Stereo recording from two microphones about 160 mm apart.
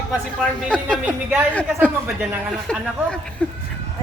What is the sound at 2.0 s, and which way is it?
Speech, 10° right (ahead or behind).